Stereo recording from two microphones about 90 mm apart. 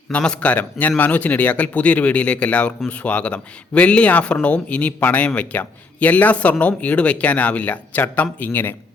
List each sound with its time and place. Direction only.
0.1 s speech: 10° left (ahead or behind)